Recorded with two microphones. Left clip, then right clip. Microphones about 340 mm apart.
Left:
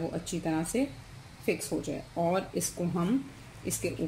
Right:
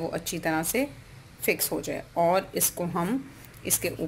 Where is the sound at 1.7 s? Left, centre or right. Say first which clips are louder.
Right 3 dB; right.